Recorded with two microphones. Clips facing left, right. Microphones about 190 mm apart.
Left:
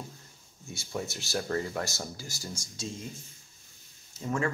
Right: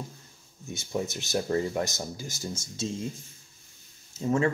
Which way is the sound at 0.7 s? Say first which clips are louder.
Right 4 dB; 20° right (ahead or behind).